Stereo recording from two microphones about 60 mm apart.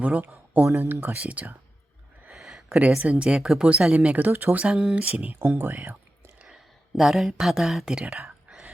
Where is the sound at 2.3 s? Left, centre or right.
Centre.